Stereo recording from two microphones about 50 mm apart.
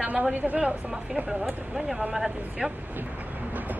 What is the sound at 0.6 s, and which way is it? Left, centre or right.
A woman's voice, centre.